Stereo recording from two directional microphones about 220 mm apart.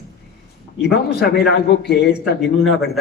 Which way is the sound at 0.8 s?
45° left (ahead or behind).